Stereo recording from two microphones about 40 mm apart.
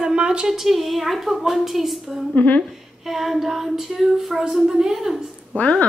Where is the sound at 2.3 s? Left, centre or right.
Left.